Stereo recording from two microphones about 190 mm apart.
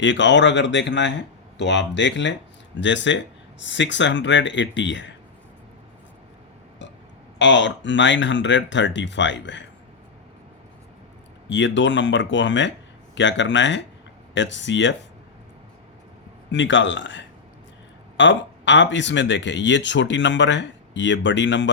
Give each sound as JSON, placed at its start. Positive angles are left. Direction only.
{"t": 0.0, "sound": "speech", "side_deg": 75}
{"t": 7.3, "sound": "speech", "side_deg": 70}
{"t": 11.4, "sound": "speech", "side_deg": 75}
{"t": 16.5, "sound": "speech", "side_deg": 75}